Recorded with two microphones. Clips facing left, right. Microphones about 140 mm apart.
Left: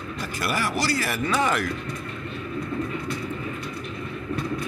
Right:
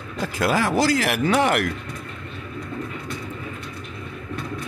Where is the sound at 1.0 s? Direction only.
75° right (ahead or behind).